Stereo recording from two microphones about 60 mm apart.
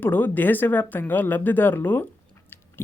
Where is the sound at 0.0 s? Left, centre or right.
Left.